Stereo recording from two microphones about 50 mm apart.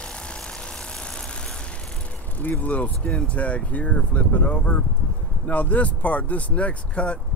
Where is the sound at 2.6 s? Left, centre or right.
Left.